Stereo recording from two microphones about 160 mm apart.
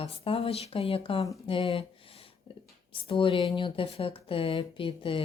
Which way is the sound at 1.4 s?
35° left (ahead or behind).